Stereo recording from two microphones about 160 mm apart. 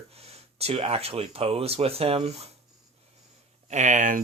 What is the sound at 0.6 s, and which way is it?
Speech, 40° right (ahead or behind).